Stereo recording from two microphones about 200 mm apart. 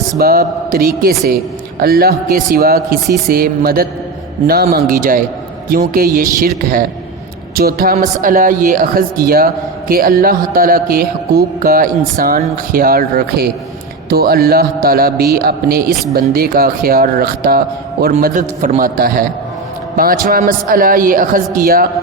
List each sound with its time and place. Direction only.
0.2 s speech: 50° right (ahead or behind)
7.5 s a man's voice: 50° right (ahead or behind)